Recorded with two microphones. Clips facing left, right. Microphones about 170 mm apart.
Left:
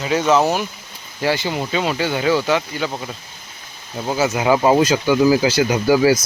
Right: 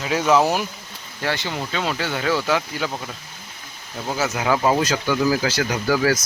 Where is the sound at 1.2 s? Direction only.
10° left (ahead or behind).